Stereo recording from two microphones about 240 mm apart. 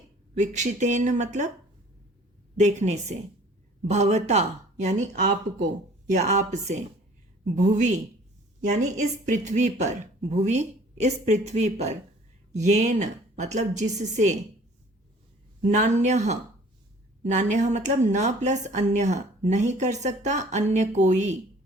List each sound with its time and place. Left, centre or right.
0.3 s speech: right
2.6 s a woman's voice: right
15.6 s speech: right